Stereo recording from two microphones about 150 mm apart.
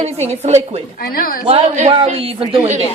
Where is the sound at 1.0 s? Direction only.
80° left.